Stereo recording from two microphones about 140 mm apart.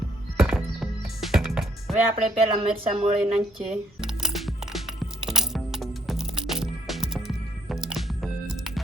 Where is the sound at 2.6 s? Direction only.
40° right (ahead or behind).